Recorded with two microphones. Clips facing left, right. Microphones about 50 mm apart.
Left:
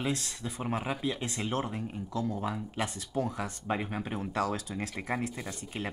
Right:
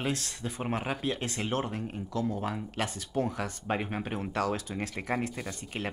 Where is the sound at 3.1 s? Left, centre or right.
Centre.